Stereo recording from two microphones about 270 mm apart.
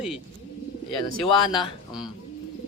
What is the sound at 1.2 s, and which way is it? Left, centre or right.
Speech, centre.